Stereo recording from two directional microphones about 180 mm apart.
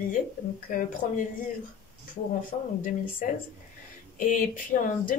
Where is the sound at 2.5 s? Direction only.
40° left (ahead or behind).